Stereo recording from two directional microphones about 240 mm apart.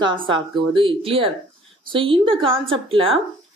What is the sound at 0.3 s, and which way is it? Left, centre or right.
A woman's voice, right.